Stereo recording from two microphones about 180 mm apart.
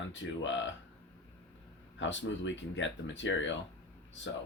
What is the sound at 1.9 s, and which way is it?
Speech, 90° left.